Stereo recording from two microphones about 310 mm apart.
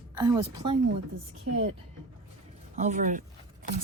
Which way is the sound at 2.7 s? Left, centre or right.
Right.